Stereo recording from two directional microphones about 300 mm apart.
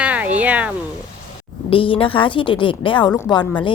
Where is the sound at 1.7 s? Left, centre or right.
Centre.